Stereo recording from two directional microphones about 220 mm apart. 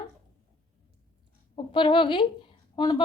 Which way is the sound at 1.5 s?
20° left (ahead or behind).